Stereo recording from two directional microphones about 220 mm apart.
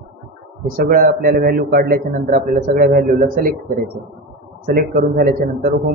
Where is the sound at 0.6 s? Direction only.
40° right (ahead or behind).